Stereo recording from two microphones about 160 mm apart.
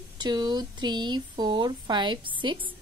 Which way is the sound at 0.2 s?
25° right (ahead or behind).